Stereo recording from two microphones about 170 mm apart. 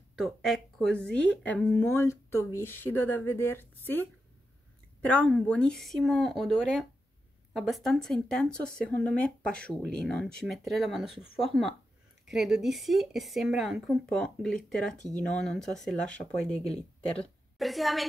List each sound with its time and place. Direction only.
0.1 s speech: centre (ahead or behind)